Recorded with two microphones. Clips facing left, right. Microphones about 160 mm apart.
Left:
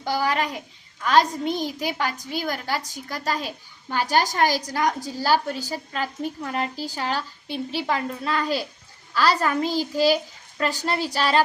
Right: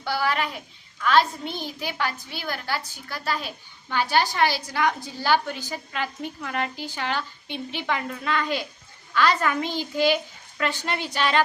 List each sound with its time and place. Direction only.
0.0 s a woman's voice: 40° left (ahead or behind)